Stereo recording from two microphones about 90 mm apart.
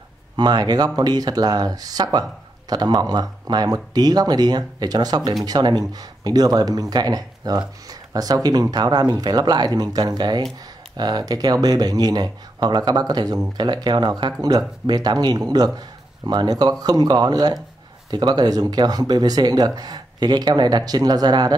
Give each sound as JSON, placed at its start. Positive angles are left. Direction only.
{"t": 0.4, "sound": "speech", "side_deg": -50}